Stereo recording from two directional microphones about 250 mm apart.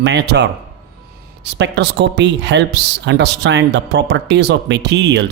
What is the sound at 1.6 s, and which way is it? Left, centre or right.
Speech, right.